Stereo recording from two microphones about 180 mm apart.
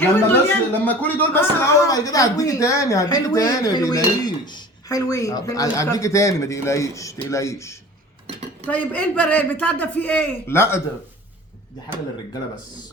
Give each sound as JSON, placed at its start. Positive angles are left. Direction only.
{"t": 0.0, "sound": "speech", "side_deg": 10}